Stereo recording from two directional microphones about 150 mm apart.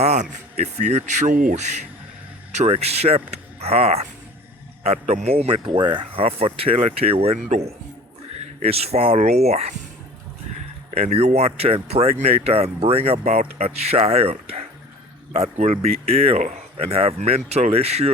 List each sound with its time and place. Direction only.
0.0 s speech: 50° right (ahead or behind)
10.9 s speech: 45° right (ahead or behind)